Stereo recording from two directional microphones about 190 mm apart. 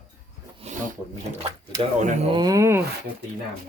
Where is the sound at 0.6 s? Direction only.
35° right (ahead or behind).